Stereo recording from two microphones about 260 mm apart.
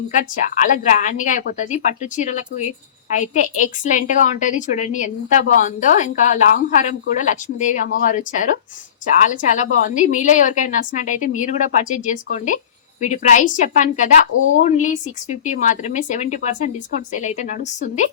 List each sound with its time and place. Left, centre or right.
0.2 s a woman's voice: left